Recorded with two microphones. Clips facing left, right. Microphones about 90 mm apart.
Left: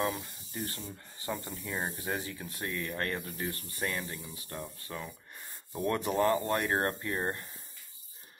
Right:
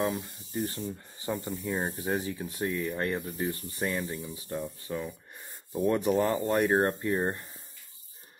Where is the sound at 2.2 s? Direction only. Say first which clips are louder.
Right 6 dB; 20° right (ahead or behind).